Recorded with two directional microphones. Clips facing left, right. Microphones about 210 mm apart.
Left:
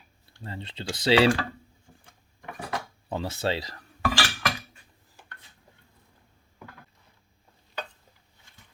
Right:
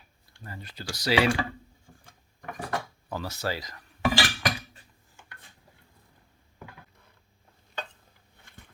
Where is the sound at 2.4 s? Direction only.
Centre (ahead or behind).